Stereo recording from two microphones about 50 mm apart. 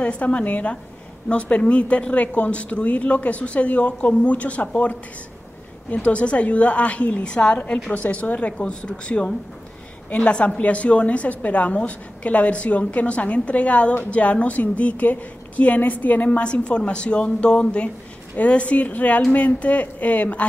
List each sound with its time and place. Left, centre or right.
0.0 s a woman's voice: left
5.9 s a woman's voice: left
16.4 s a woman's voice: left